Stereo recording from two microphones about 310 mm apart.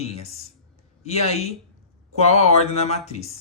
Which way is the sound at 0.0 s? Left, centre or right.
Centre.